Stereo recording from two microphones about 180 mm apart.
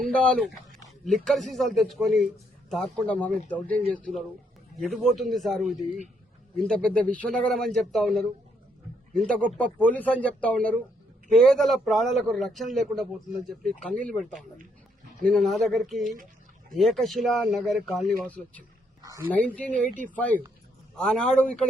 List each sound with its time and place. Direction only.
0.1 s a man's voice: 5° left (ahead or behind)